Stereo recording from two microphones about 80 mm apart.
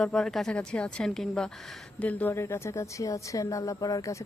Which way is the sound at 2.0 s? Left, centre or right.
Left.